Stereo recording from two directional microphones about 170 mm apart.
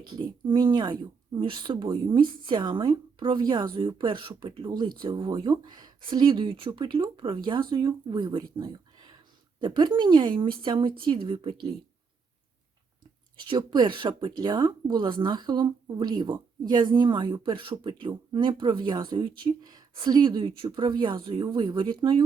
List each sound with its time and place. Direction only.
0.0 s speech: 30° right (ahead or behind)
8.5 s a sound: 25° right (ahead or behind)
9.6 s speech: 25° right (ahead or behind)
13.3 s speech: 25° right (ahead or behind)